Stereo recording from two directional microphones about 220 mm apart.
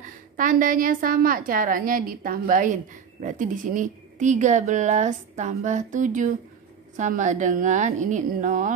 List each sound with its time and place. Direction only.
0.0 s a woman's voice: 35° right (ahead or behind)